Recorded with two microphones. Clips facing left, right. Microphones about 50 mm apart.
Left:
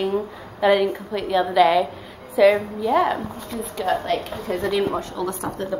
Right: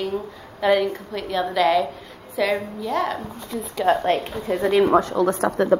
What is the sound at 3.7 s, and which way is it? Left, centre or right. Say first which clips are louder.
A woman's voice: right 3 dB; right.